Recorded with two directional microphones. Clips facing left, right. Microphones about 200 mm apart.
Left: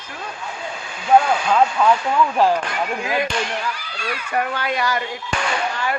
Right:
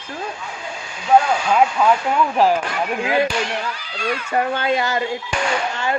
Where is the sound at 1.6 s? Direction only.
15° right (ahead or behind).